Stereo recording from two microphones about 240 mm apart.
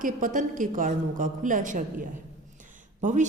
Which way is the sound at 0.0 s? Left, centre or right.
Right.